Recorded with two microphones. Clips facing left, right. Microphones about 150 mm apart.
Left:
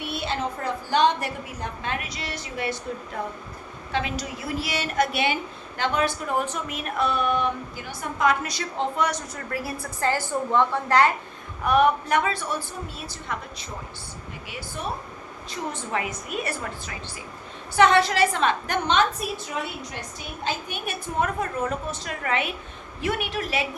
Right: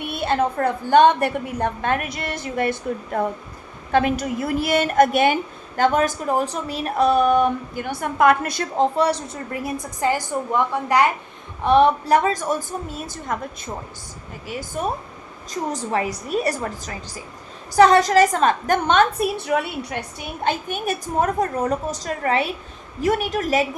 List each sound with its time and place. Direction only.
0.0 s a woman's voice: 50° right (ahead or behind)
7.9 s a woman's voice: 60° right (ahead or behind)
8.8 s a woman's voice: 30° right (ahead or behind); by 11.1 s 15° right (ahead or behind)
11.6 s a woman's voice: 30° right (ahead or behind)
14.4 s a woman's voice: 45° right (ahead or behind)